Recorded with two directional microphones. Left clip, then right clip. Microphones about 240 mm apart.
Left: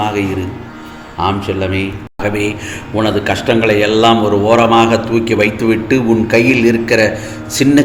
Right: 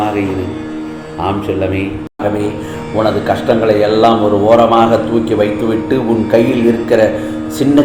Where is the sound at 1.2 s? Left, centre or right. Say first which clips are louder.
Even; left.